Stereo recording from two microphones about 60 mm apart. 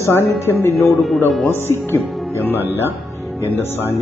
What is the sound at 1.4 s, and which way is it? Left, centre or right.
Speech, left.